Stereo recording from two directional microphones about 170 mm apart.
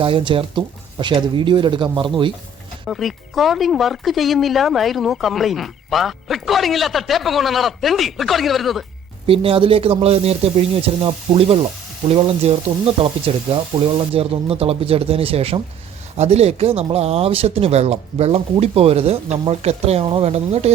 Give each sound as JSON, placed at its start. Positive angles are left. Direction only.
{"t": 0.0, "sound": "speech", "side_deg": -30}
{"t": 2.8, "sound": "speech", "side_deg": 0}
{"t": 9.2, "sound": "speech", "side_deg": -35}